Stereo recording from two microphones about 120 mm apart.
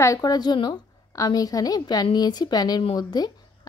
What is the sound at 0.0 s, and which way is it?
A woman's voice, 30° left (ahead or behind).